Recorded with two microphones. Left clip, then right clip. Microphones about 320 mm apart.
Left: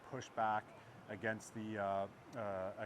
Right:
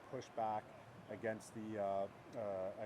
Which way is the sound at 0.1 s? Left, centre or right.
Left.